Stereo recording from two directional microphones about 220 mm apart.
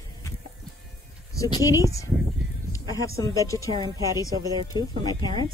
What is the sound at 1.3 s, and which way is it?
Speech, 15° left (ahead or behind).